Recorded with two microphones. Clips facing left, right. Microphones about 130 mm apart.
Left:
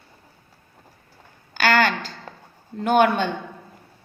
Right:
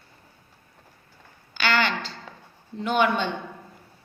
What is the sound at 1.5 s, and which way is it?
A woman's voice, 45° left (ahead or behind).